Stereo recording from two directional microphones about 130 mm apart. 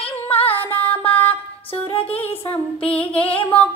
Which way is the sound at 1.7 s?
45° left (ahead or behind).